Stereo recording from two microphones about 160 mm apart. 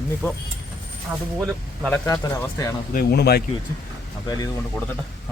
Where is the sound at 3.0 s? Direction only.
85° left.